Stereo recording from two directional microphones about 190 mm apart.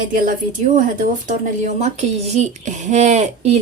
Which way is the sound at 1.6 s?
35° right (ahead or behind).